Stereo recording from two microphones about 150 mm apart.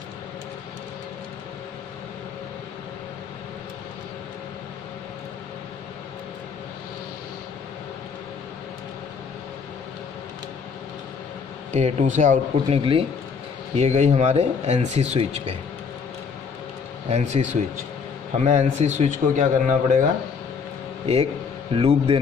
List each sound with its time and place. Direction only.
11.7 s speech: 55° right (ahead or behind)
12.6 s a man's voice: 40° right (ahead or behind)
13.7 s speech: 50° right (ahead or behind)
17.1 s speech: 50° right (ahead or behind)
21.0 s a man's voice: 40° right (ahead or behind)